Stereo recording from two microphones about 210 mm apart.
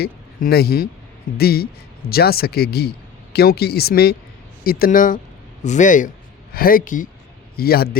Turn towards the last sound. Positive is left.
turn(degrees=45)  # may be behind; listen again after turning